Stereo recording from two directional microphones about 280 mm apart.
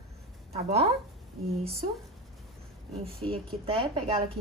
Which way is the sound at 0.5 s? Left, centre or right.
Right.